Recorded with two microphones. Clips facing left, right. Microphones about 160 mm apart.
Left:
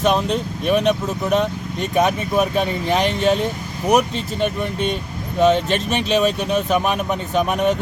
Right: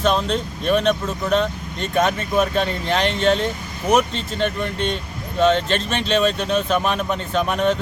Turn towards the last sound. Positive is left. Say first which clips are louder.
# left 1 dB
turn(degrees=10)  # may be behind; listen again after turning